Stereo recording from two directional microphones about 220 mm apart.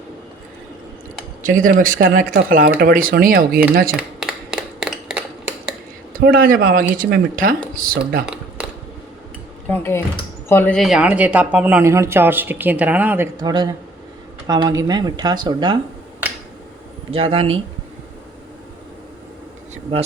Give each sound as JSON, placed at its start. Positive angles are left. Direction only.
{"t": 1.4, "sound": "speech", "side_deg": -35}
{"t": 3.9, "sound": "a sound", "side_deg": -5}
{"t": 6.1, "sound": "speech", "side_deg": -40}
{"t": 9.6, "sound": "speech", "side_deg": 10}
{"t": 17.1, "sound": "speech", "side_deg": -25}